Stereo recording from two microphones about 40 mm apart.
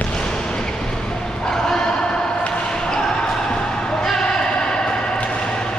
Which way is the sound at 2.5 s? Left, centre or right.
Centre.